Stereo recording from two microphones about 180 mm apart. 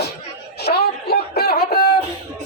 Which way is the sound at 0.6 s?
60° left (ahead or behind).